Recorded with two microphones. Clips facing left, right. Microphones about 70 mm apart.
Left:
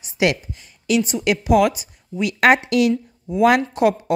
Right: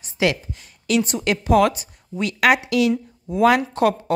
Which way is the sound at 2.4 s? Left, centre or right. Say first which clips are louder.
Left 2 dB; left.